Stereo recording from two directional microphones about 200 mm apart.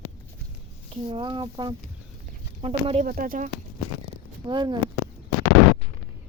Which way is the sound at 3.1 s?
45° right (ahead or behind).